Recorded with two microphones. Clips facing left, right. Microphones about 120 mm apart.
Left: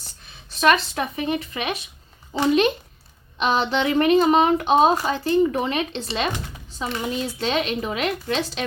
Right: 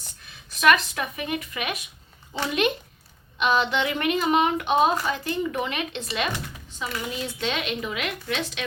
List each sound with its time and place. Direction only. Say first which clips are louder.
0.6 s speech: left 2 dB; 30° left (ahead or behind)